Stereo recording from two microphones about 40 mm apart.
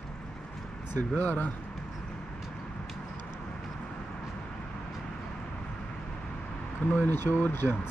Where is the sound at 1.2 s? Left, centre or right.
Left.